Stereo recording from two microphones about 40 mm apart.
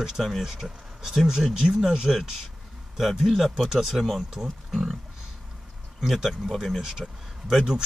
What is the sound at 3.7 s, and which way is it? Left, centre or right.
Speech, centre.